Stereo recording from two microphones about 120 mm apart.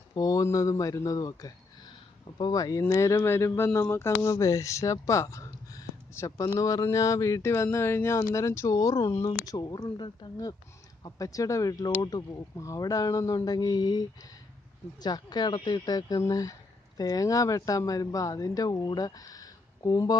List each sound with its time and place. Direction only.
0.1 s speech: 30° left (ahead or behind)